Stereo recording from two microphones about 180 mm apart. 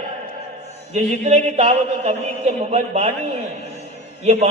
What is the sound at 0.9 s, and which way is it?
A man's voice, 35° right (ahead or behind).